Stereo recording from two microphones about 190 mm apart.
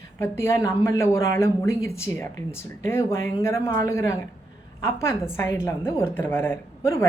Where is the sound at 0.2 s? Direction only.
15° left (ahead or behind).